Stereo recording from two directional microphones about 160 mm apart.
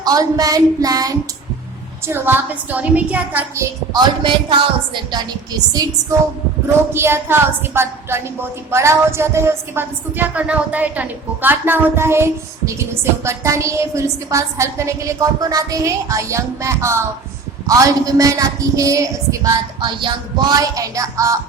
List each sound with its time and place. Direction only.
0.0 s a woman's voice: 25° right (ahead or behind)
3.9 s a woman's voice: 30° right (ahead or behind)
6.9 s a woman's voice: 15° right (ahead or behind)